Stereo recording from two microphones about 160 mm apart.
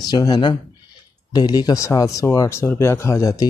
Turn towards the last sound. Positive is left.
turn(degrees=20)  # may be behind; listen again after turning